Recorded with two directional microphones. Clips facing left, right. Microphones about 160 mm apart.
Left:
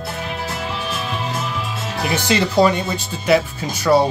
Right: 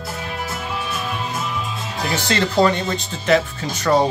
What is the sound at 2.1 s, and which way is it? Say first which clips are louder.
Speech: left 2 dB; 10° left (ahead or behind).